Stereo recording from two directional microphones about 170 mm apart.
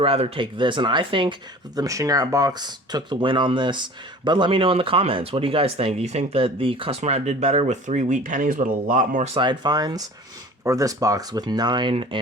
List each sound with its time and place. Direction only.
0.0 s speech: 35° right (ahead or behind); by 9.3 s 50° right (ahead or behind)
9.3 s speech: 30° right (ahead or behind)